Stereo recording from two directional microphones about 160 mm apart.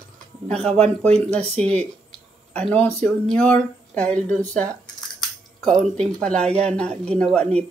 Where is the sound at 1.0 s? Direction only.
40° right (ahead or behind).